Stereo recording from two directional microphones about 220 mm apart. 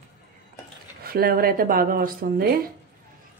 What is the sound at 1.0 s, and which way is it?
Speech, 45° right (ahead or behind).